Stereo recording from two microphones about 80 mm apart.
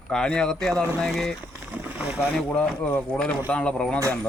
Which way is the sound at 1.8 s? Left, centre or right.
Centre.